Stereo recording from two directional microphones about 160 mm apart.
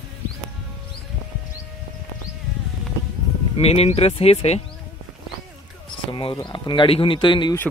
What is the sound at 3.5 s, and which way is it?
Speech, 40° left (ahead or behind).